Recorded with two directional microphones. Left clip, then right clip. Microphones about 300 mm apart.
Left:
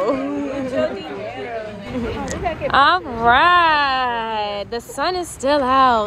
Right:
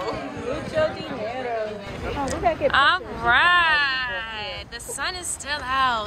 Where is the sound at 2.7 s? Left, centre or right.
Centre.